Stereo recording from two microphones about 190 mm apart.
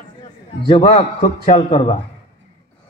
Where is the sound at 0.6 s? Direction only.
30° left (ahead or behind).